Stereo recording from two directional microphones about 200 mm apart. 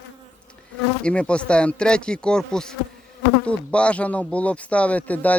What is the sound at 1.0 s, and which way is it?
Speech, 5° left (ahead or behind).